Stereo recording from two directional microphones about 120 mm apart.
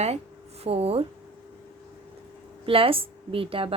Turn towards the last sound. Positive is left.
turn(degrees=-50)  # may be behind; listen again after turning